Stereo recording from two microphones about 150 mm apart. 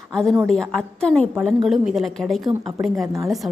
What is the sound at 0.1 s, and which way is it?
A woman's voice, 5° left (ahead or behind).